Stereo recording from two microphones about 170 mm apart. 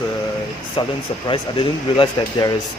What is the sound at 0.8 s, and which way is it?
Speech, 30° left (ahead or behind).